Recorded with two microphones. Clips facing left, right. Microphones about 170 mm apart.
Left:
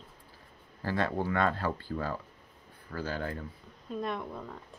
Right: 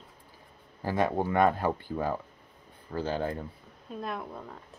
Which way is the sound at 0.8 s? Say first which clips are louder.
Right 3 dB; 15° right (ahead or behind).